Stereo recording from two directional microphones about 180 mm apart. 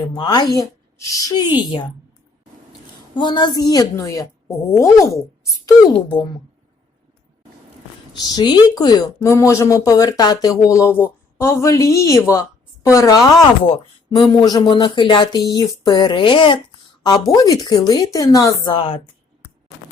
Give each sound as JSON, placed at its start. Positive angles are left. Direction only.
{"t": 0.0, "sound": "speech", "side_deg": 25}
{"t": 3.2, "sound": "speech", "side_deg": 25}
{"t": 8.1, "sound": "a woman's voice", "side_deg": 20}